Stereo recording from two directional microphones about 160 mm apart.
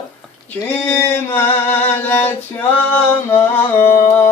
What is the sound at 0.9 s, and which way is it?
Music, 15° left (ahead or behind).